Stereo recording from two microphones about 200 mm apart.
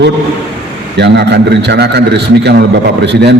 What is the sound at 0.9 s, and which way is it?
A man's voice, 55° right (ahead or behind).